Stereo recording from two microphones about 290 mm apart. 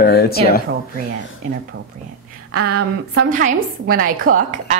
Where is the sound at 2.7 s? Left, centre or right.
Right.